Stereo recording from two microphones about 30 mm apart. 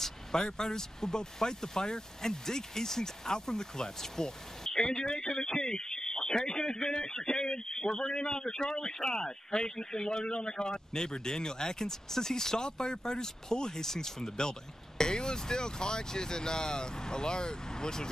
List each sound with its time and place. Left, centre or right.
0.0 s vehicle: centre
0.5 s speech: centre